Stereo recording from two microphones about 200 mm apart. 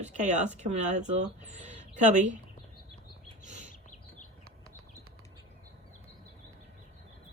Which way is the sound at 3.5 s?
35° right (ahead or behind).